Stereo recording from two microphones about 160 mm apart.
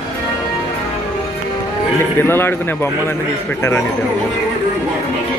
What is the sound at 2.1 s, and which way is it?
Speech, 15° left (ahead or behind).